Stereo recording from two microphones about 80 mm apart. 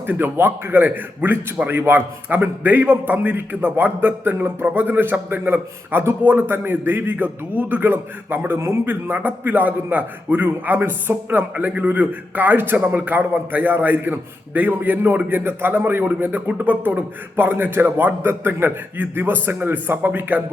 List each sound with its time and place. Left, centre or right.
0.1 s a man's voice: right